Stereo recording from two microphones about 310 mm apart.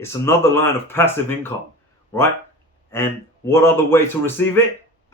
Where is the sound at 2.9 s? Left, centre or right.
Centre.